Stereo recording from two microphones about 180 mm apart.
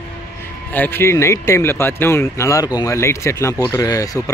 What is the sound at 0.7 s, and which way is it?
Speech, 10° left (ahead or behind).